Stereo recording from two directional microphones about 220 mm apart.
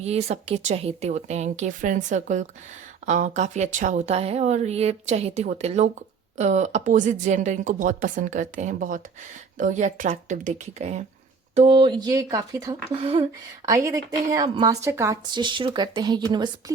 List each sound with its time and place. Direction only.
0.0 s speech: 30° right (ahead or behind)
13.7 s a woman's voice: 15° right (ahead or behind)